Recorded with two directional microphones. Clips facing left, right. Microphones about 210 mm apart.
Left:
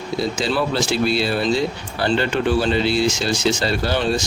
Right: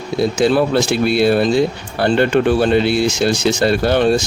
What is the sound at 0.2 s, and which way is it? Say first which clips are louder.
Speech: right 8 dB; 55° right (ahead or behind).